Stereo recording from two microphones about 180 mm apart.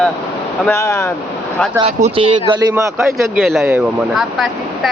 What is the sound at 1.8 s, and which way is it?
Speech, 35° right (ahead or behind).